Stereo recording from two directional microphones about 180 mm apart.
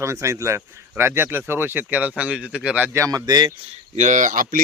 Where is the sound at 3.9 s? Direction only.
40° right (ahead or behind).